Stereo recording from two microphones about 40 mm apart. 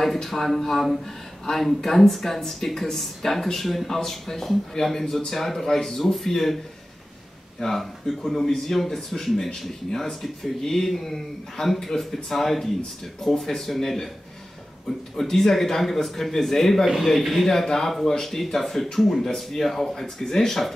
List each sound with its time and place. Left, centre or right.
0.0 s speech: centre
7.6 s speech: centre
9.8 s speech: centre
10.2 s speech: centre
15.1 s speech: centre
17.5 s speech: centre